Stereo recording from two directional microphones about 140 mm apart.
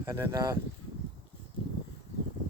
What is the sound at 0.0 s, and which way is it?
Speech, 20° right (ahead or behind).